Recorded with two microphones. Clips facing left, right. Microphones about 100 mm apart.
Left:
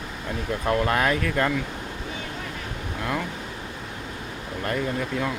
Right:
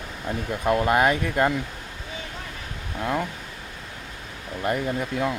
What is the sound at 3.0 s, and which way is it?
Speech, 20° right (ahead or behind).